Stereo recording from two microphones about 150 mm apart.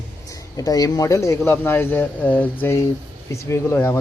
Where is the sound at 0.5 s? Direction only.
25° left (ahead or behind).